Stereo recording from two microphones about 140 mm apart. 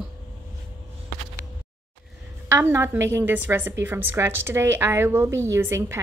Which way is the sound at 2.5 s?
20° right (ahead or behind).